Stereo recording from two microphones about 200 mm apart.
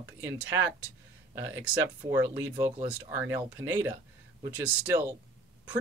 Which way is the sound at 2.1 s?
10° right (ahead or behind).